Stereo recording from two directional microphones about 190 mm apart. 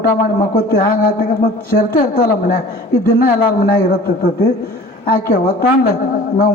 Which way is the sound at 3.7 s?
50° left (ahead or behind).